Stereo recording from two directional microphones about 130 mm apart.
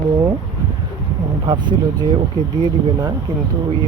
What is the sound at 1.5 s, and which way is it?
Speech, 35° right (ahead or behind).